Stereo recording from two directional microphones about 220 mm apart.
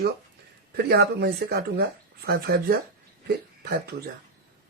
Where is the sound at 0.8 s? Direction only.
45° right (ahead or behind).